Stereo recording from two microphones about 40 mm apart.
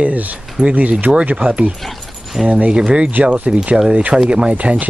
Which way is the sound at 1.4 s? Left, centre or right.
Right.